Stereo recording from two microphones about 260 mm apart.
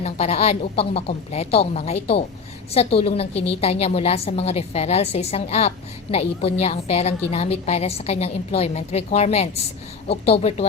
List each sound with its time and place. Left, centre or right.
0.0 s a woman's voice: left